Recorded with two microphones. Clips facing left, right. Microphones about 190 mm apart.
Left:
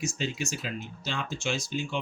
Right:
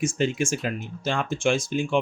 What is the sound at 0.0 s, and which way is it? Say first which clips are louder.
Speech: right 8 dB; 50° right (ahead or behind).